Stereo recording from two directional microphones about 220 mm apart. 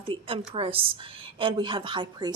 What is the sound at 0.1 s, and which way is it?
A woman's voice, 25° right (ahead or behind).